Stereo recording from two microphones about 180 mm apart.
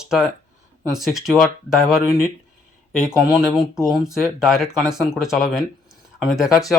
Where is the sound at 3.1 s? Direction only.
5° right (ahead or behind).